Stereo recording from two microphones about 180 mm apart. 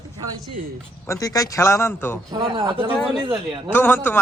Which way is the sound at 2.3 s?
20° right (ahead or behind).